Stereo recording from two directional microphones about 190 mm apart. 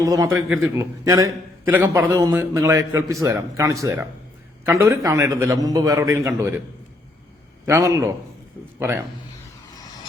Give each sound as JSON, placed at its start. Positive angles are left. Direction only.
{"t": 0.0, "sound": "a man's voice", "side_deg": -15}
{"t": 7.6, "sound": "a man's voice", "side_deg": -15}